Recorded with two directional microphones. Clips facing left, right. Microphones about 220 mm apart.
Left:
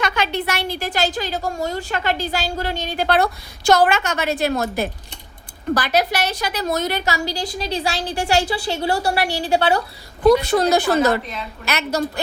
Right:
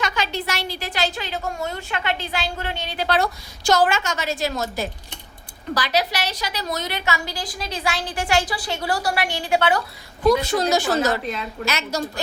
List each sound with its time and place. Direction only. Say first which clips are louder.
0.0 s a woman's voice: left 4 dB; 60° left (ahead or behind); by 9.8 s 30° left (ahead or behind)
10.2 s a woman's voice: left 4 dB; 60° left (ahead or behind)